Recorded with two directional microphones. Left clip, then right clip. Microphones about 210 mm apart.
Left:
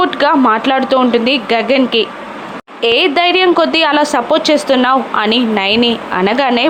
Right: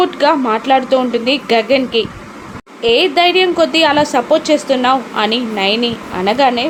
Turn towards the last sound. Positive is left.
turn(degrees=20)  # may be behind; listen again after turning